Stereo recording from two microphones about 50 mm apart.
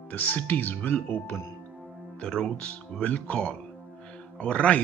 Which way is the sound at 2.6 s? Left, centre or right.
Left.